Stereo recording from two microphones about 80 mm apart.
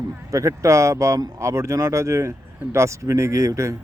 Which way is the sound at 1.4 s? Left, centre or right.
Right.